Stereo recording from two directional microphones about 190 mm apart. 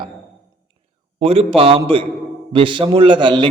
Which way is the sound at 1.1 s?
30° right (ahead or behind).